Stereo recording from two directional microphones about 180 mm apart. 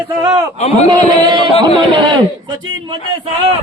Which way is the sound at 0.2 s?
20° right (ahead or behind).